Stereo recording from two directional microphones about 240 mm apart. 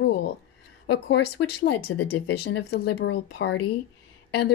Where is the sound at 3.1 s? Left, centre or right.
Left.